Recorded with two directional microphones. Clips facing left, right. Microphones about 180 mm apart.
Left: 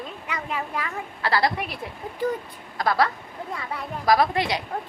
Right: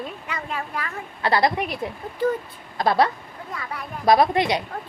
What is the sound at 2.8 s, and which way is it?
A woman's voice, 25° right (ahead or behind).